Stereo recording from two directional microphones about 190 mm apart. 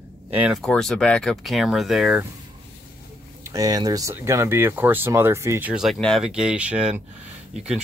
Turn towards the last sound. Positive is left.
turn(degrees=-5)  # may be behind; listen again after turning